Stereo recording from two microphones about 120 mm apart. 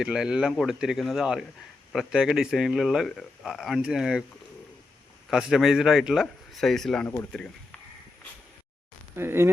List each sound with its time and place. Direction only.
0.0 s a man's voice: 5° right (ahead or behind)
5.3 s a man's voice: 5° right (ahead or behind)
9.1 s speech: 20° right (ahead or behind)